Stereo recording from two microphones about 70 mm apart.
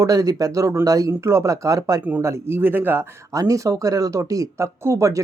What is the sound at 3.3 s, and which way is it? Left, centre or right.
Speech, right.